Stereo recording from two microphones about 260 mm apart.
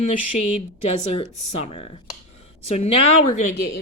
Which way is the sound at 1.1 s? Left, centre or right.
Left.